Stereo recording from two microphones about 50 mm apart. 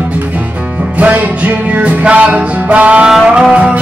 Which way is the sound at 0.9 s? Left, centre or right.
Right.